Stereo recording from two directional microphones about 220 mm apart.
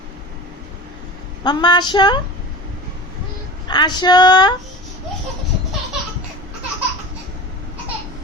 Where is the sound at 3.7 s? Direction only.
20° left (ahead or behind).